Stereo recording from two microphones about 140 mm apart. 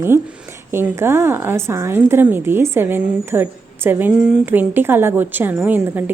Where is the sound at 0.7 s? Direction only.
15° right (ahead or behind).